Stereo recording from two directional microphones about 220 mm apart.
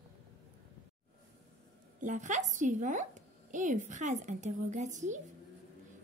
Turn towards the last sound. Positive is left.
turn(degrees=-35)  # may be behind; listen again after turning